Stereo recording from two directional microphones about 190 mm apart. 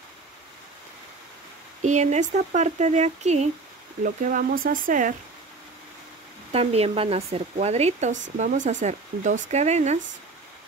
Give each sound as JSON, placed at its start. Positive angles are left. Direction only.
{"t": 1.8, "sound": "speech", "side_deg": -40}
{"t": 6.5, "sound": "speech", "side_deg": -30}